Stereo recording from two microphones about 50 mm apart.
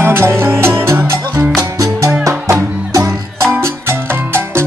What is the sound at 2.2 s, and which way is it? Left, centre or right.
Music, right.